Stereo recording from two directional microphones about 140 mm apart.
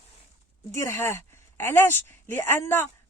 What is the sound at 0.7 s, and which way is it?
Speech, 20° left (ahead or behind).